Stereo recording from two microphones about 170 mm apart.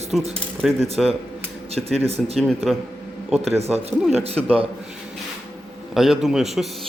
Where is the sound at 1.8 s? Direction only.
35° right (ahead or behind).